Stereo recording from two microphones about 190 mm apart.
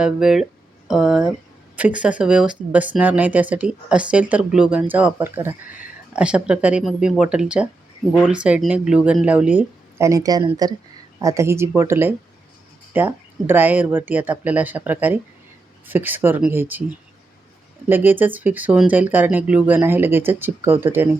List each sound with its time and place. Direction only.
0.0 s speech: centre (ahead or behind)
17.8 s speech: 10° right (ahead or behind)